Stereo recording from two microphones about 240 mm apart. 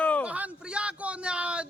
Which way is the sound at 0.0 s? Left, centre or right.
Centre.